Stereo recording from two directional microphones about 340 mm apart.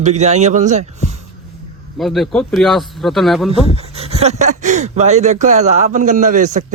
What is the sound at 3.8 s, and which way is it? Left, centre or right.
Speech, centre.